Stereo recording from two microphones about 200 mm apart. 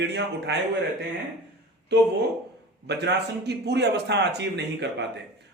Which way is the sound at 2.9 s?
60° right (ahead or behind).